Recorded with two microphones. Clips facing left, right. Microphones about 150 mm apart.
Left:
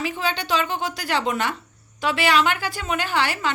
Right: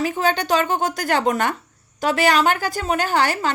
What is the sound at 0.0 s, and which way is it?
A woman's voice, 45° right (ahead or behind).